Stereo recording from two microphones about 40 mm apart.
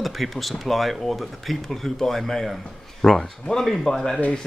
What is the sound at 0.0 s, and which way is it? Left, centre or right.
Speech, centre.